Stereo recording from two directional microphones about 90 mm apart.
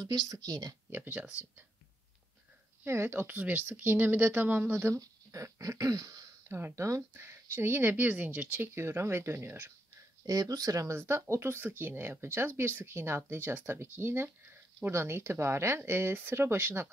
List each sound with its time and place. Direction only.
0.0 s speech: 45° right (ahead or behind)
0.8 s speech: 20° right (ahead or behind)
2.8 s speech: 25° right (ahead or behind)
5.0 s dog: 40° right (ahead or behind)
6.5 s speech: 30° right (ahead or behind)
10.2 s speech: 45° right (ahead or behind); by 16.9 s 25° right (ahead or behind)